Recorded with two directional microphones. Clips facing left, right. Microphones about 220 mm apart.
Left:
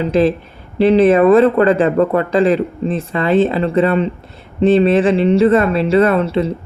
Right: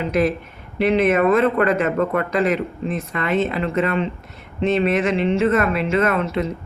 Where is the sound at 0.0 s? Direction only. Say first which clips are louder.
Left 6 dB; 30° left (ahead or behind).